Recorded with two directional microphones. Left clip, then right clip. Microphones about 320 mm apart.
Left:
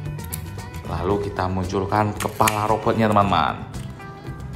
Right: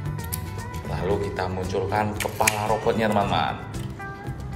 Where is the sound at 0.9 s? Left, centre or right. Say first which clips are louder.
Left 3 dB; centre.